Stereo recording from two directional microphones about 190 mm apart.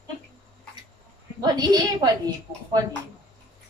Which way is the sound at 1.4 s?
20° right (ahead or behind).